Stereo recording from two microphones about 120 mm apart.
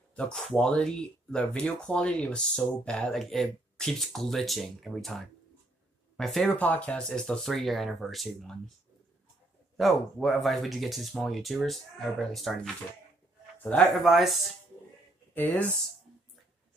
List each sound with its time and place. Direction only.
0.1 s a sound: 10° left (ahead or behind)
0.5 s speech: 5° left (ahead or behind)
6.5 s speech: 15° left (ahead or behind)
9.8 s speech: centre (ahead or behind)
13.6 s speech: 15° left (ahead or behind)
14.0 s speech: centre (ahead or behind)
15.3 s speech: 15° left (ahead or behind)